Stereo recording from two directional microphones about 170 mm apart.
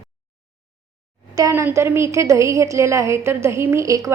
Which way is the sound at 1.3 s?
20° right (ahead or behind).